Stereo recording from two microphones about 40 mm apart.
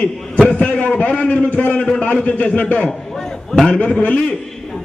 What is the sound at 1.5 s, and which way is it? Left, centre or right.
A man's voice, left.